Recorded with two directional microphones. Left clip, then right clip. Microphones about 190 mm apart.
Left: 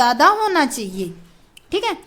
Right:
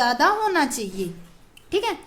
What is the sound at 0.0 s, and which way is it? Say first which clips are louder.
A woman's voice: left 5 dB; 30° left (ahead or behind).